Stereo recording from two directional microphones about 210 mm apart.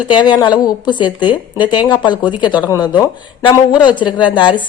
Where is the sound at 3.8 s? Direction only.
20° left (ahead or behind).